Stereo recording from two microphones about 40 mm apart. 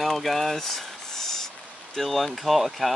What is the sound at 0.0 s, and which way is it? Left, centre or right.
Speech, centre.